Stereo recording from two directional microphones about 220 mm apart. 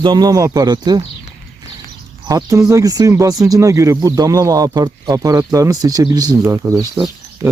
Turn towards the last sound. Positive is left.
turn(degrees=-10)  # may be behind; listen again after turning